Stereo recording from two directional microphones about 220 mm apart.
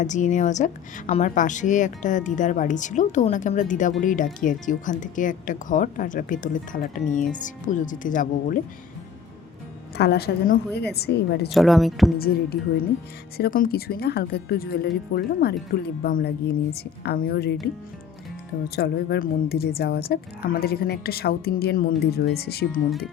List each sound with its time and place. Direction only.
0.0 s speech: 35° left (ahead or behind)
10.0 s a woman's voice: 45° left (ahead or behind)
11.5 s speech: centre (ahead or behind)
12.1 s a woman's voice: 45° left (ahead or behind)
18.8 s a woman's voice: 45° left (ahead or behind)